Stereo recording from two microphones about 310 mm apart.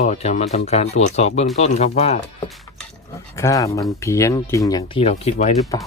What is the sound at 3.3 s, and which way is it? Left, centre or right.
Speech, centre.